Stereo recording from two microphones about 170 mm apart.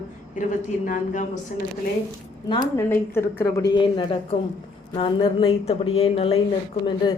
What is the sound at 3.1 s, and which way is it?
A woman's voice, 15° left (ahead or behind).